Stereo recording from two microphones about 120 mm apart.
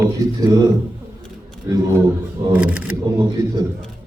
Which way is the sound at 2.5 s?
10° right (ahead or behind).